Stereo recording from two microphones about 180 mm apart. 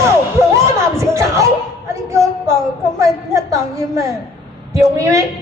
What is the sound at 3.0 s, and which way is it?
A woman's voice, 20° right (ahead or behind).